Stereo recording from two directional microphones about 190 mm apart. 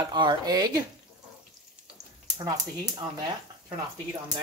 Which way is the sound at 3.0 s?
25° right (ahead or behind).